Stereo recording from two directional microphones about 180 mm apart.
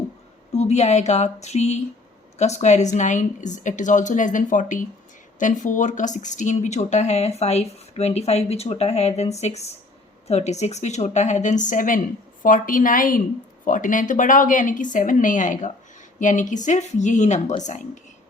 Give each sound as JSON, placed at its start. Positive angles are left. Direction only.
{"t": 0.5, "sound": "a woman's voice", "side_deg": 40}